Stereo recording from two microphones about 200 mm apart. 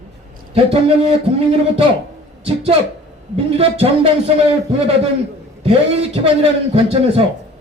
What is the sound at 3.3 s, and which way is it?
A man's voice, 30° right (ahead or behind).